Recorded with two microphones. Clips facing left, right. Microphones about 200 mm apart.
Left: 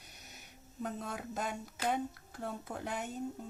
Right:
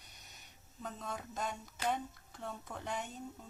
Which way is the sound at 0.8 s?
35° left (ahead or behind).